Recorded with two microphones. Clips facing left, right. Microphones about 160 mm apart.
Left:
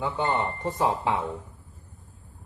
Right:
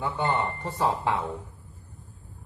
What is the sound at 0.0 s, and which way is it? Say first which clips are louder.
Speech: left 1 dB; 20° left (ahead or behind).